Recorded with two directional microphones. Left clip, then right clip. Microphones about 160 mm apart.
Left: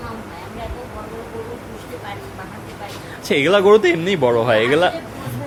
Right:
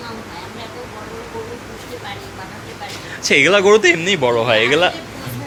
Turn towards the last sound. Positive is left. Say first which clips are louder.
# right 1 dB
turn(degrees=20)  # may be behind; listen again after turning